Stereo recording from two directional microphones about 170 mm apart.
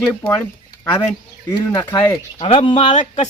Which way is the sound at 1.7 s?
20° left (ahead or behind).